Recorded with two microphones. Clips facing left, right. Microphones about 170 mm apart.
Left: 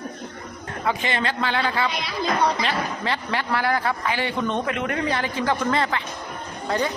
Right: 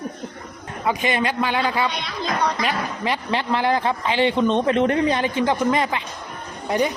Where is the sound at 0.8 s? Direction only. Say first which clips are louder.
Right 3 dB; 15° right (ahead or behind).